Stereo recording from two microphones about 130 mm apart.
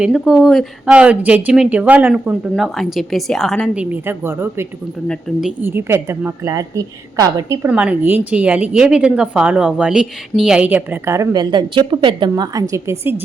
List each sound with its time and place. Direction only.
0.0 s a woman's voice: 5° right (ahead or behind)
2.6 s a woman's voice: centre (ahead or behind)
4.0 s a woman's voice: 15° right (ahead or behind)
5.4 s a woman's voice: 5° right (ahead or behind)
5.6 s a woman's voice: 20° right (ahead or behind)
7.7 s a woman's voice: 10° right (ahead or behind)